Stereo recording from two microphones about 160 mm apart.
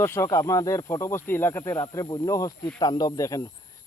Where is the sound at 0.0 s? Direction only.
15° left (ahead or behind).